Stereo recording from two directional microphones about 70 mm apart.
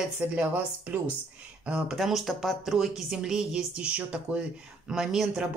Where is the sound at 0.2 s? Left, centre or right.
Centre.